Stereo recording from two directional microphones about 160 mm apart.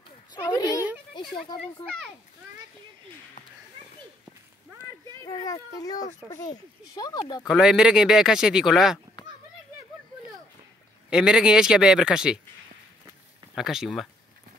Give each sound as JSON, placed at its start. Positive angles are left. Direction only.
{"t": 0.3, "sound": "a sound", "side_deg": 20}
{"t": 5.2, "sound": "a child's voice", "side_deg": 20}
{"t": 7.4, "sound": "speech", "side_deg": -5}
{"t": 11.1, "sound": "speech", "side_deg": -5}
{"t": 13.6, "sound": "speech", "side_deg": 0}